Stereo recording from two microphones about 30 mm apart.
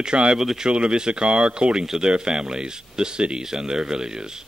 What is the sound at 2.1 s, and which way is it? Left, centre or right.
Speech, right.